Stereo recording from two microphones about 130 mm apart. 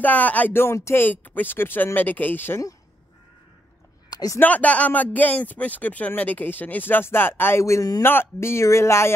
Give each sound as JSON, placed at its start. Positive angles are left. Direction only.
{"t": 0.0, "sound": "speech", "side_deg": 10}
{"t": 4.1, "sound": "a sound", "side_deg": 30}
{"t": 4.4, "sound": "speech", "side_deg": 10}